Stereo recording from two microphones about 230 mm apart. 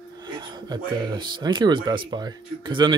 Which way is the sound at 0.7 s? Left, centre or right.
Centre.